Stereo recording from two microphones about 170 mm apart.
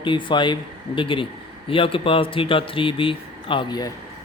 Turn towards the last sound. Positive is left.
turn(degrees=25)  # may be behind; listen again after turning